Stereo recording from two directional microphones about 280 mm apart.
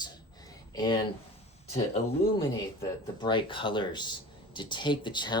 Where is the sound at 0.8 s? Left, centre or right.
Centre.